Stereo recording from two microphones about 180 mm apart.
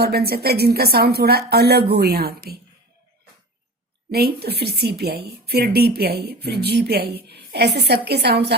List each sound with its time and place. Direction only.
0.0 s speech: 60° right (ahead or behind)
4.1 s speech: 60° right (ahead or behind)